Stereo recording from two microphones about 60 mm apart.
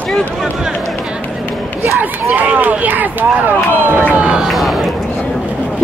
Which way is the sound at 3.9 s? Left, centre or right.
Right.